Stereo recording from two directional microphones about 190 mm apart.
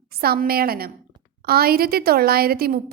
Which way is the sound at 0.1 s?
55° right (ahead or behind).